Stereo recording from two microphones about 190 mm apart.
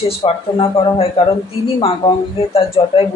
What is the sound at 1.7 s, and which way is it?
Speech, 30° left (ahead or behind).